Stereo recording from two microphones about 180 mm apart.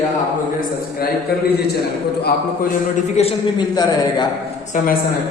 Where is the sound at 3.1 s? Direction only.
35° left (ahead or behind).